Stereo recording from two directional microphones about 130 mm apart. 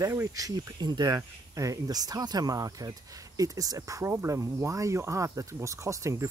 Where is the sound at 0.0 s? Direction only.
25° right (ahead or behind).